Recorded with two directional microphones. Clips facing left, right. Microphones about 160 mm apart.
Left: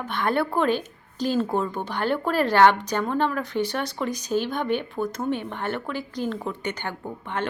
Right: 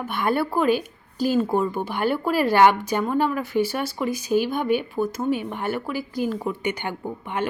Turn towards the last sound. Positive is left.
turn(degrees=-10)  # may be behind; listen again after turning